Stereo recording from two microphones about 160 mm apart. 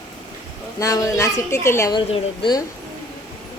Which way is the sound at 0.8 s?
20° left (ahead or behind).